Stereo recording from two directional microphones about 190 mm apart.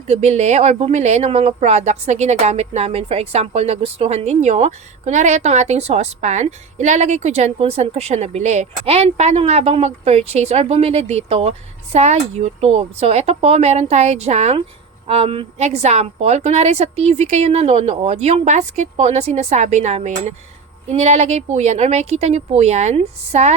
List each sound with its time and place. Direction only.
0.1 s speech: 35° right (ahead or behind)